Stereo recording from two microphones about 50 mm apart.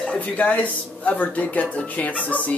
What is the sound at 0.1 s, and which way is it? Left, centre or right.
Speech, left.